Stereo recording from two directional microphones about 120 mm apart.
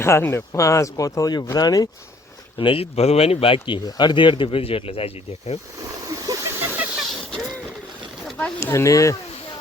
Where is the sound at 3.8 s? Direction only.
35° left (ahead or behind); by 5.6 s 55° left (ahead or behind).